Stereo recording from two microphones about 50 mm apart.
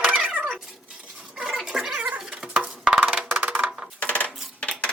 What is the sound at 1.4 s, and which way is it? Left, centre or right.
Cat, centre.